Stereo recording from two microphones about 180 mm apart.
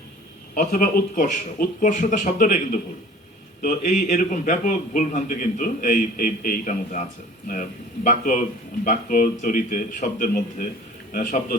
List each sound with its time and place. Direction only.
0.5 s a man's voice: 50° left (ahead or behind)